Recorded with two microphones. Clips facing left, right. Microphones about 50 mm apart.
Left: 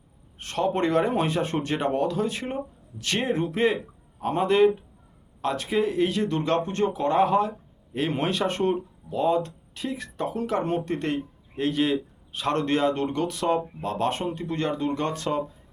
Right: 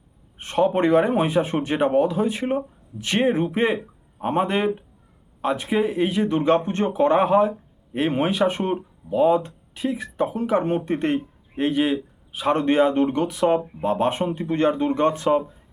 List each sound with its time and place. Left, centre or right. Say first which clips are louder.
0.3 s speech: right 5 dB; right
11.7 s speech: right 2 dB; centre